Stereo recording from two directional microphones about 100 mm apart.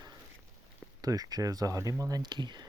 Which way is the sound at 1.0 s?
40° right (ahead or behind).